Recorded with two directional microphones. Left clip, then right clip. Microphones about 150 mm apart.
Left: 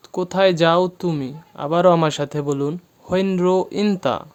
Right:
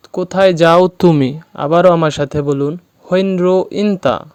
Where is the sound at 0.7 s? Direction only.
55° right (ahead or behind).